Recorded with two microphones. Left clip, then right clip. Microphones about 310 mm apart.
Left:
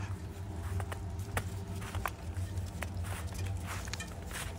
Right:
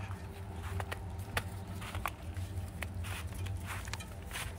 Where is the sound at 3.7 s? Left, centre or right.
Centre.